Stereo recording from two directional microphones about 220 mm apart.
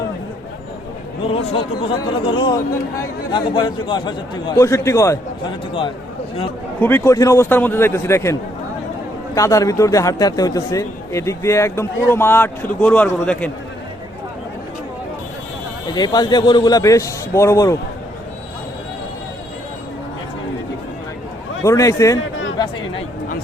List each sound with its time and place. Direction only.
1.3 s a man's voice: 25° left (ahead or behind)
6.7 s a man's voice: 10° left (ahead or behind)
15.9 s a man's voice: 20° left (ahead or behind)
21.6 s a man's voice: 15° left (ahead or behind)